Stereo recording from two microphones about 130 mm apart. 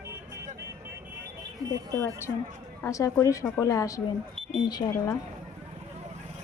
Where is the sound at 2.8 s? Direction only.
25° left (ahead or behind).